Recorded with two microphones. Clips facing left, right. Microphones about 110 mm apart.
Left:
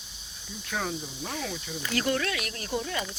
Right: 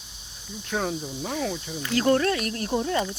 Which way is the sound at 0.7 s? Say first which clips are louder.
Right 5 dB; 30° right (ahead or behind).